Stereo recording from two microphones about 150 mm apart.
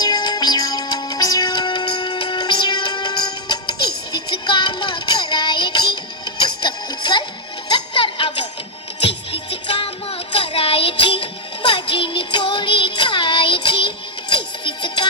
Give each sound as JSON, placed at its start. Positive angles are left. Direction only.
{"t": 0.0, "sound": "music", "side_deg": 30}